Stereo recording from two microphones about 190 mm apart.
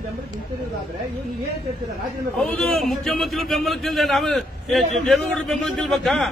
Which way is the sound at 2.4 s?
5° left (ahead or behind).